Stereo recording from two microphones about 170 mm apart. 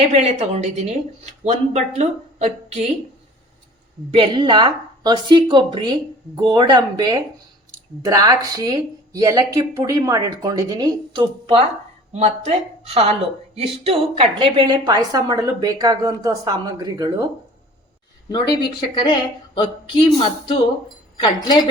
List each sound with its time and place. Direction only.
0.1 s speech: 40° right (ahead or behind)
4.1 s a woman's voice: 30° right (ahead or behind)
18.3 s speech: 25° left (ahead or behind)